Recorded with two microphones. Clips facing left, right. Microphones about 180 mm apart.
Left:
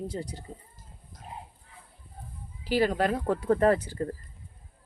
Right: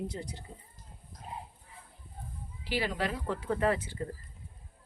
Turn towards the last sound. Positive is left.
turn(degrees=40)  # may be behind; listen again after turning